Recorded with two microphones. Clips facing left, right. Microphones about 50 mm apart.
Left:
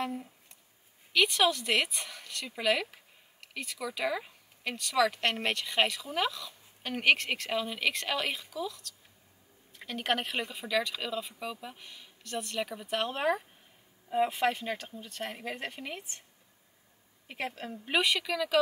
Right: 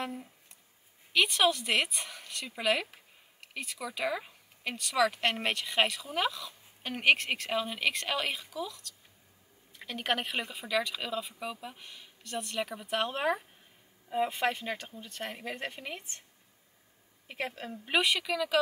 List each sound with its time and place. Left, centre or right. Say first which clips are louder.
0.0 s speech: left 3 dB; centre
17.3 s speech: even; centre